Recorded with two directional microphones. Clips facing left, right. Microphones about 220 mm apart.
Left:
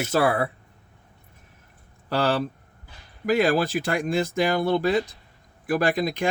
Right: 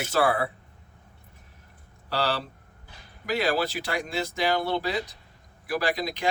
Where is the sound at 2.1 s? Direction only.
50° left (ahead or behind).